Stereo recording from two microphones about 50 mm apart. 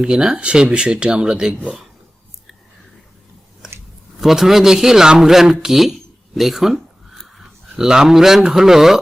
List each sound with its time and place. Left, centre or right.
0.0 s speech: centre
4.2 s speech: centre
7.1 s a sound: centre
7.9 s speech: centre